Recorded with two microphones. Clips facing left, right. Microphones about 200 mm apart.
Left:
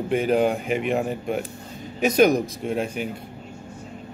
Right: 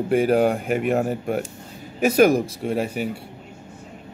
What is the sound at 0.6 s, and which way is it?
Speech, 50° right (ahead or behind).